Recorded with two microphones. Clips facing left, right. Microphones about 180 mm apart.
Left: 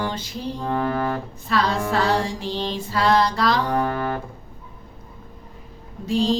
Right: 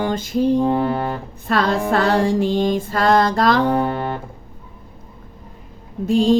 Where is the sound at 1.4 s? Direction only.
55° right (ahead or behind).